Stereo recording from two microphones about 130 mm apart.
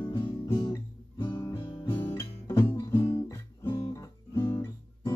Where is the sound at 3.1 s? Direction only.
25° left (ahead or behind).